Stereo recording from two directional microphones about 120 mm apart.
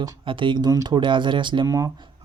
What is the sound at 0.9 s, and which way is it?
Speech, 40° right (ahead or behind).